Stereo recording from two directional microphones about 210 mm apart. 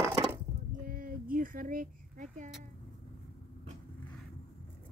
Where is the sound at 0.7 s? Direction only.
40° right (ahead or behind).